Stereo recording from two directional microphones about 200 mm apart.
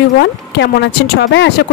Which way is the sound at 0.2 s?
60° left (ahead or behind).